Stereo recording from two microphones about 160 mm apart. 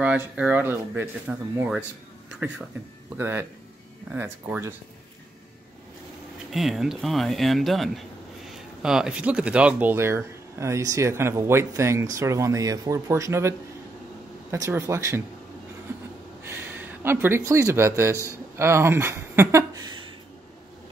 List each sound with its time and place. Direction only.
0.0 s speech: 10° right (ahead or behind)
3.2 s speech: 15° right (ahead or behind)
6.5 s speech: centre (ahead or behind); by 15.2 s 20° right (ahead or behind)
16.4 s speech: 15° right (ahead or behind)